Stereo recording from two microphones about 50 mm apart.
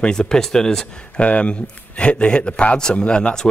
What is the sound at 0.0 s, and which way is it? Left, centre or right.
Speech, centre.